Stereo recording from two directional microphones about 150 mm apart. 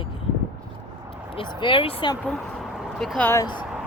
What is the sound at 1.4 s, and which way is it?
Speech, 35° left (ahead or behind).